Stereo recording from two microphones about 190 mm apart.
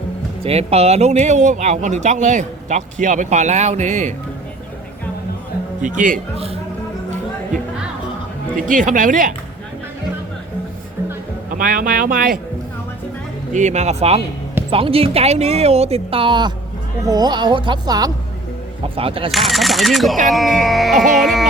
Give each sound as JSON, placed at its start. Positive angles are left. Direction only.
{"t": 0.4, "sound": "speech", "side_deg": -30}
{"t": 5.8, "sound": "speech", "side_deg": -40}
{"t": 8.5, "sound": "speech", "side_deg": -45}
{"t": 11.5, "sound": "speech", "side_deg": -50}
{"t": 13.5, "sound": "speech", "side_deg": -40}
{"t": 19.3, "sound": "speech", "side_deg": 0}